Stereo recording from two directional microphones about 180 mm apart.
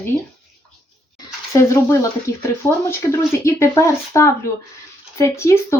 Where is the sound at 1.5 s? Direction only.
15° left (ahead or behind).